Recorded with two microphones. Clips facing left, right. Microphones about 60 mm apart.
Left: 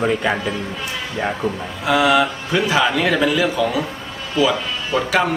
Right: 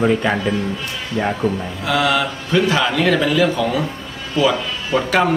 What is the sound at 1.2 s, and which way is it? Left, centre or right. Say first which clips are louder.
A man's voice: right 3 dB; centre.